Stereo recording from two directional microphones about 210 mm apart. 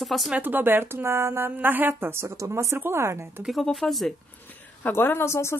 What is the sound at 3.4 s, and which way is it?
Speech, centre (ahead or behind).